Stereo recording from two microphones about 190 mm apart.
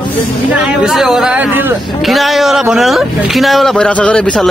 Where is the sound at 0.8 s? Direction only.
Centre (ahead or behind).